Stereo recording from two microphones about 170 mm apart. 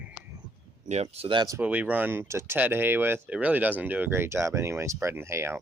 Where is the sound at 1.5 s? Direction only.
10° right (ahead or behind).